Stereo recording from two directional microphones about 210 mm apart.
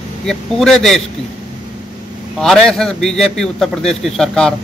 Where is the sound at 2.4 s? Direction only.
Centre (ahead or behind).